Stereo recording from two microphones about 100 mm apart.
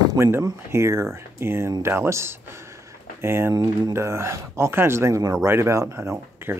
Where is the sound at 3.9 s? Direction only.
25° right (ahead or behind).